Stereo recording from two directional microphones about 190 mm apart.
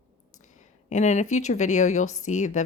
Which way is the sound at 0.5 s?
40° left (ahead or behind).